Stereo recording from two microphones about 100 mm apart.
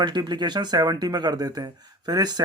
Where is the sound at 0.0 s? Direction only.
45° right (ahead or behind).